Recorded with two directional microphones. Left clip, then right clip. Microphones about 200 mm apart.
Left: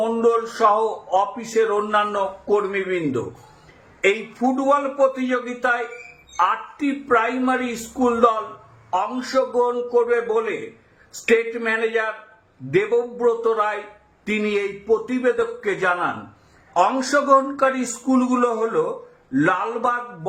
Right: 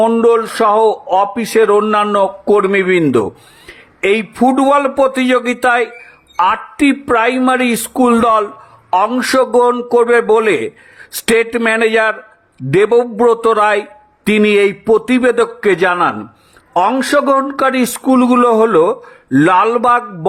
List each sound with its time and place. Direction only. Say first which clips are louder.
0.1 s a man's voice: right 8 dB; 50° right (ahead or behind)